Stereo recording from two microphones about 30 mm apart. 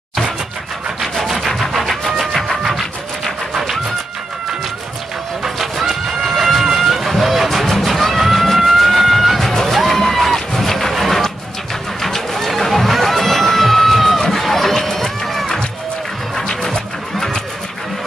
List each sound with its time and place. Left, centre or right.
1.7 s a sound: centre
5.4 s vehicle: centre
7.4 s music: centre
9.4 s music: centre
10.5 s a sound: centre
12.0 s run: centre
16.3 s music: centre